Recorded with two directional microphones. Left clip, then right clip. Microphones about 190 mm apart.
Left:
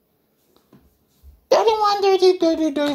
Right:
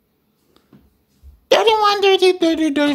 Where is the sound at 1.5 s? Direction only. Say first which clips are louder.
Right 3 dB; 15° right (ahead or behind).